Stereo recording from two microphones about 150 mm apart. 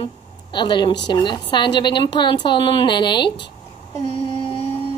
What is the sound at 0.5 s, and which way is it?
Child singing, 30° left (ahead or behind).